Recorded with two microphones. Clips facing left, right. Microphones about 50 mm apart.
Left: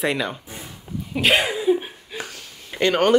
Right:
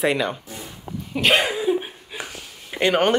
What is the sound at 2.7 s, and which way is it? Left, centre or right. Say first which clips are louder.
Speech: even; centre.